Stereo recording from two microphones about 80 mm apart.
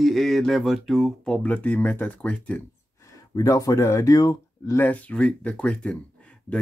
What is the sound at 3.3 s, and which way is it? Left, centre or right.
Speech, left.